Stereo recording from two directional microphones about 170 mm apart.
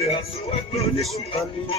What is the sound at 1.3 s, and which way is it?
Speech, 35° left (ahead or behind).